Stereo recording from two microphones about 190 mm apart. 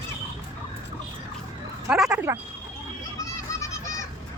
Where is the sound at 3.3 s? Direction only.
15° left (ahead or behind).